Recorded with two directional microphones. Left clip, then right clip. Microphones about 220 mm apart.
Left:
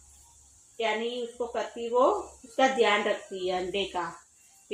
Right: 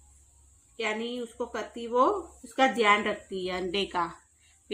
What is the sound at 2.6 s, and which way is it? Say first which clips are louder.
Speech: right 1 dB; 45° right (ahead or behind).